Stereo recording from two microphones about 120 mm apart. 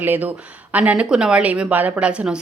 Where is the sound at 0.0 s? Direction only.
15° right (ahead or behind).